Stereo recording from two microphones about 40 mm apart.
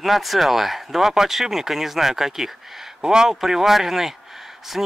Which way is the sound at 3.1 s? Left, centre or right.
Centre.